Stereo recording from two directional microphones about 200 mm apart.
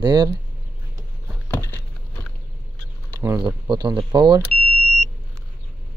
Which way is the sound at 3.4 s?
25° right (ahead or behind).